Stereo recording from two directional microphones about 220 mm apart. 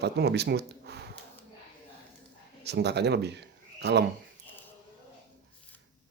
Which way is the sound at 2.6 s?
50° right (ahead or behind).